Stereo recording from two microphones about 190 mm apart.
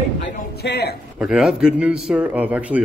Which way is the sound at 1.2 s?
5° right (ahead or behind).